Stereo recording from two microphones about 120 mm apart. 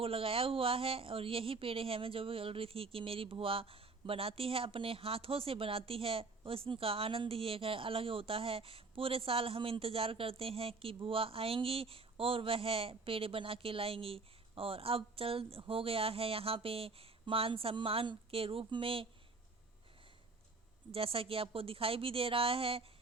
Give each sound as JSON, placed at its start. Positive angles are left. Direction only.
{"t": 0.0, "sound": "speech", "side_deg": -50}
{"t": 20.9, "sound": "speech", "side_deg": -50}